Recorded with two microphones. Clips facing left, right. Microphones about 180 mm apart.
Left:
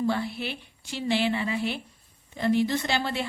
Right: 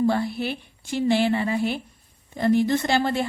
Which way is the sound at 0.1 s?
45° right (ahead or behind).